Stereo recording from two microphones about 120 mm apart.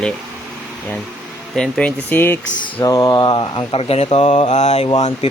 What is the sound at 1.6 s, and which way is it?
Speech, 10° left (ahead or behind).